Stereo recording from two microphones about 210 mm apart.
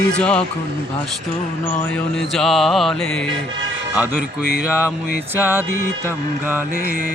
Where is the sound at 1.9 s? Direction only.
Centre (ahead or behind).